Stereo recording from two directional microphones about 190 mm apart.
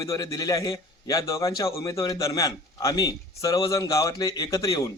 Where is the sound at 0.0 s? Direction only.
15° left (ahead or behind).